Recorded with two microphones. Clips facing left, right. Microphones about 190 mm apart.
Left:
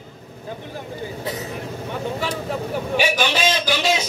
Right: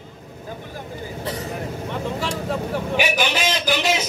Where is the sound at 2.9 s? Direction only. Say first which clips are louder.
Left 2 dB; 15° right (ahead or behind).